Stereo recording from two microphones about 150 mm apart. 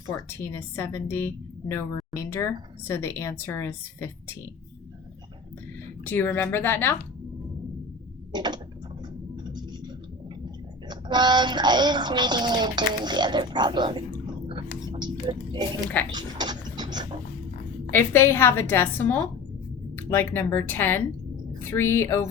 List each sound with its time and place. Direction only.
0.1 s a woman's voice: 15° left (ahead or behind)
6.1 s a woman's voice: 15° left (ahead or behind)
8.3 s mechanisms: 30° right (ahead or behind)
9.3 s a sound: 30° right (ahead or behind)
10.8 s child singing: 30° right (ahead or behind)
16.1 s a sound: 30° right (ahead or behind)
17.9 s a woman's voice: 15° left (ahead or behind)